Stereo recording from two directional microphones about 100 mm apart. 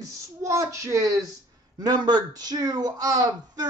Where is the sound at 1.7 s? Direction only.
45° right (ahead or behind).